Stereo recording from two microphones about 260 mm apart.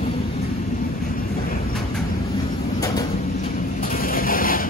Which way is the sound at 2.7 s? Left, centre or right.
Centre.